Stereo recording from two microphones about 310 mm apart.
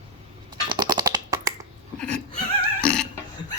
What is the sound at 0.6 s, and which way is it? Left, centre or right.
Typing, centre.